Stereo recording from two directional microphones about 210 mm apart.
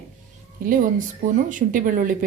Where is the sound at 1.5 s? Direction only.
40° right (ahead or behind).